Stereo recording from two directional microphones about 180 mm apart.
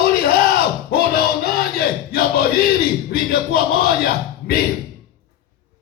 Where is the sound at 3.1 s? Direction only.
55° left (ahead or behind).